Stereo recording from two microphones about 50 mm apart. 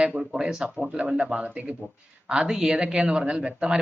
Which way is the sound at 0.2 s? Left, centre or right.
Centre.